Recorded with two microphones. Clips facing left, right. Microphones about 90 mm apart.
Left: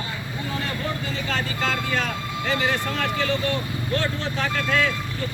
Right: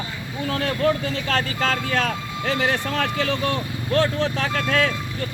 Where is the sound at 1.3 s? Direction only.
65° right (ahead or behind).